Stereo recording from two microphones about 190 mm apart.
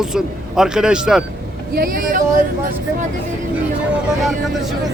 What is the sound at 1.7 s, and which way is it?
Speech, 50° right (ahead or behind).